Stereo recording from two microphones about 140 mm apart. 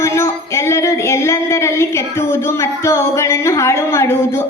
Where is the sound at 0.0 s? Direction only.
20° left (ahead or behind).